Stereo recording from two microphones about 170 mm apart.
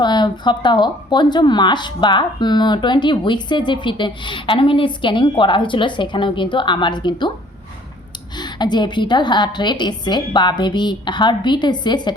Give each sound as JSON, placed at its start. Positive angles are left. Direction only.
{"t": 0.0, "sound": "a woman's voice", "side_deg": 25}
{"t": 8.4, "sound": "a woman's voice", "side_deg": 25}